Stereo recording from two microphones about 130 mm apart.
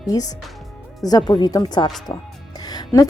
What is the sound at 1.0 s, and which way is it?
A woman's voice, 30° left (ahead or behind).